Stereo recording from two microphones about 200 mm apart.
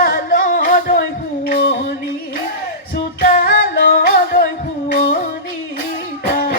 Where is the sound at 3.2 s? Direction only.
50° left (ahead or behind).